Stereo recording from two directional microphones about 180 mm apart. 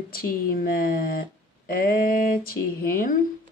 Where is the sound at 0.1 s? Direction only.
55° left (ahead or behind).